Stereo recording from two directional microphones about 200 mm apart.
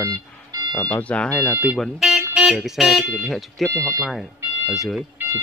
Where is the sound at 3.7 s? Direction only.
15° right (ahead or behind).